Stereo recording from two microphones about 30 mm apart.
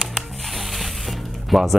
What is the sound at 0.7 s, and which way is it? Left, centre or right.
Music, centre.